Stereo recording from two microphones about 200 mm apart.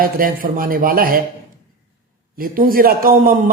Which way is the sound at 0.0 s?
45° right (ahead or behind).